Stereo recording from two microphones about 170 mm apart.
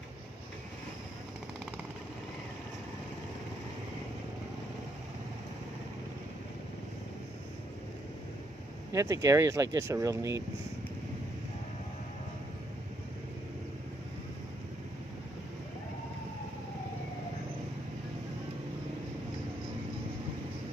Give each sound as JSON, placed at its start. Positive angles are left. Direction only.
{"t": 8.9, "sound": "speech", "side_deg": -20}